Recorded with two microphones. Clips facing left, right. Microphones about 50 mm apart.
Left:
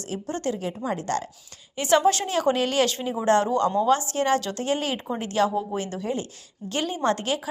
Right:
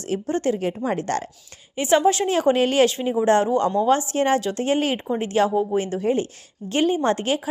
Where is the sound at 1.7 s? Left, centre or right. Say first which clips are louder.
Right 2 dB; centre.